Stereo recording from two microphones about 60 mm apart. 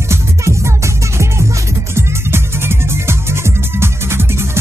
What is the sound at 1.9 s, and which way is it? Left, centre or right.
Music, right.